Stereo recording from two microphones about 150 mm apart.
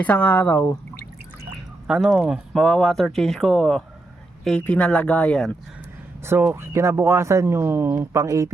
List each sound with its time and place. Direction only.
0.0 s speech: 10° left (ahead or behind)
1.9 s speech: 5° right (ahead or behind)
6.2 s speech: 15° right (ahead or behind)